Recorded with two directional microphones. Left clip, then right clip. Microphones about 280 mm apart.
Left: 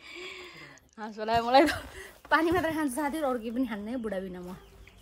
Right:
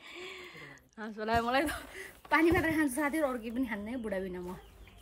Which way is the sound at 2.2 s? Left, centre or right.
Centre.